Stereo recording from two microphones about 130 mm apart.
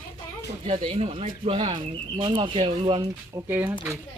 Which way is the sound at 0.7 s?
50° right (ahead or behind).